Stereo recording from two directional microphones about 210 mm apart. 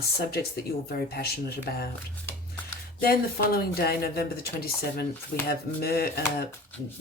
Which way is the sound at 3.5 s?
45° left (ahead or behind).